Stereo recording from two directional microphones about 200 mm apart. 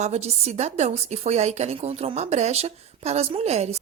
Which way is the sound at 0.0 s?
35° right (ahead or behind).